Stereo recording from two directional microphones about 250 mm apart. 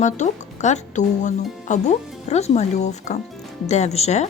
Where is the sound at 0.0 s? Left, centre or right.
Left.